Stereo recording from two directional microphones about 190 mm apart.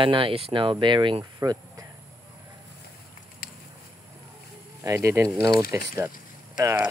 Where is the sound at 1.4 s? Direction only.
20° right (ahead or behind).